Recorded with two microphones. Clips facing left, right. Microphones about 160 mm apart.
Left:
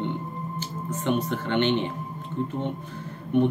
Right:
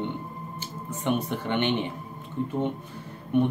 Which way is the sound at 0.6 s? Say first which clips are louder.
Left 3 dB; 10° right (ahead or behind).